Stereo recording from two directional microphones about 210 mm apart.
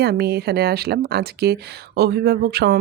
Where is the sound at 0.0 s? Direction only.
50° right (ahead or behind).